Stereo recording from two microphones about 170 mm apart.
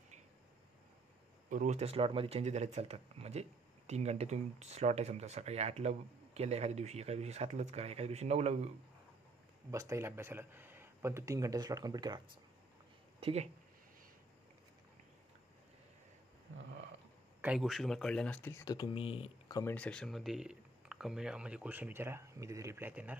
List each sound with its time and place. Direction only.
1.5 s speech: 45° right (ahead or behind)
9.7 s speech: 20° right (ahead or behind)
13.2 s speech: 40° right (ahead or behind)
17.4 s speech: 5° right (ahead or behind)
18.6 s speech: 20° left (ahead or behind)
19.5 s speech: 10° left (ahead or behind); by 23.1 s 10° right (ahead or behind)